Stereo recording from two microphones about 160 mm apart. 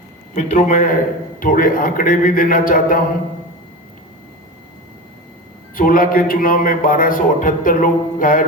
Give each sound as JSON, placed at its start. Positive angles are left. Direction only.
{"t": 0.3, "sound": "a man's voice", "side_deg": 50}
{"t": 5.7, "sound": "a man's voice", "side_deg": 60}